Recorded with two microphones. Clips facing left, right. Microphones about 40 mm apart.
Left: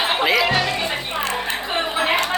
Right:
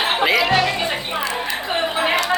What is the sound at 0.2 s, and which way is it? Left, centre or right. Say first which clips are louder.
Music: right 3 dB; centre.